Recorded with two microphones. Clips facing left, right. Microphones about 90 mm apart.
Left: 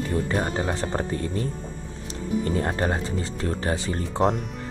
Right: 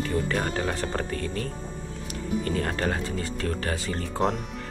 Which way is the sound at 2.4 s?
25° left (ahead or behind).